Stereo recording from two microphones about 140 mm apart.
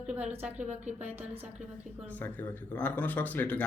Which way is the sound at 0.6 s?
55° right (ahead or behind).